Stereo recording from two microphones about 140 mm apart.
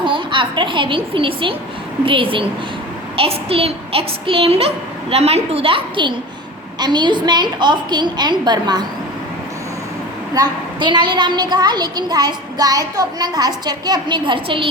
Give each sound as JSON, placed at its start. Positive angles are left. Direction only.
{"t": 0.0, "sound": "a woman's voice", "side_deg": -35}
{"t": 10.3, "sound": "a woman's voice", "side_deg": -30}